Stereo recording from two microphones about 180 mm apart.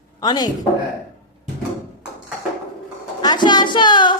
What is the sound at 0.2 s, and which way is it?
Speech, 20° left (ahead or behind).